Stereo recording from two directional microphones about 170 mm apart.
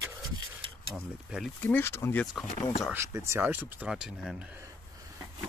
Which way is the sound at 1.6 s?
10° left (ahead or behind).